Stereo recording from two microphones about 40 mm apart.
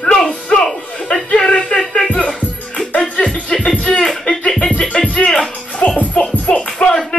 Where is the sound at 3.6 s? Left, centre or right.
Left.